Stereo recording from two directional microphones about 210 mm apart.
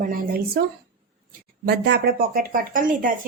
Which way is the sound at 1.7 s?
50° right (ahead or behind).